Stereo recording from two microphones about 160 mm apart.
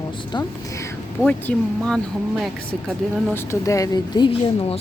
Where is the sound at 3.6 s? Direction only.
20° left (ahead or behind); by 4.8 s 35° left (ahead or behind).